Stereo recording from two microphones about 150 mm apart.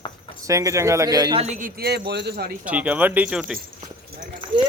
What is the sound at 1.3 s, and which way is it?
Speech, 50° right (ahead or behind).